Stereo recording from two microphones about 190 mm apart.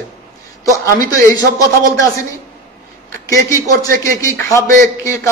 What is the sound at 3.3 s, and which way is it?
A man's voice, 15° left (ahead or behind).